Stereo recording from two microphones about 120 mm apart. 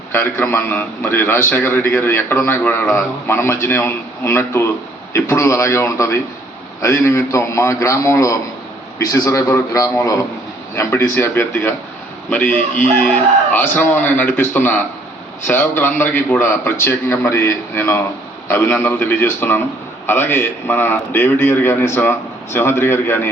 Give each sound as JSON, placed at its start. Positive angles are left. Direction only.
{"t": 0.1, "sound": "a man's voice", "side_deg": 15}
{"t": 12.9, "sound": "a man's voice", "side_deg": 15}